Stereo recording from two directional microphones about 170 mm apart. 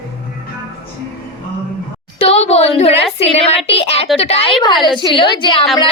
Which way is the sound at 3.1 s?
40° left (ahead or behind).